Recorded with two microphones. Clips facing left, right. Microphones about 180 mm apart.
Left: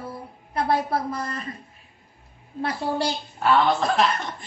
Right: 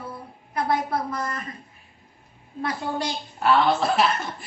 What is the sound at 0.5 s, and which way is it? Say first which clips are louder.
Speech: left 1 dB; 30° left (ahead or behind).